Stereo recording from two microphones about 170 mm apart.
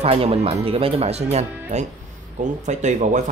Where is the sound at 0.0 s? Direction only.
35° right (ahead or behind).